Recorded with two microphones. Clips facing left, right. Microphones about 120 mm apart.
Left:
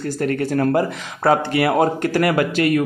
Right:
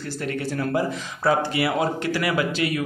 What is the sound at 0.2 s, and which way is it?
Speech, 50° left (ahead or behind).